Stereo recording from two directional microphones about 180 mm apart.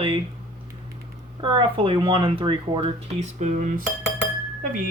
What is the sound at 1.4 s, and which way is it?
Speech, 25° right (ahead or behind).